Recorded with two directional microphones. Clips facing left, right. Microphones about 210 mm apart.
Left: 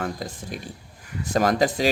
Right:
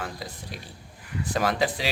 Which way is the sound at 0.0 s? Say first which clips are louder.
Left 6 dB; 45° left (ahead or behind).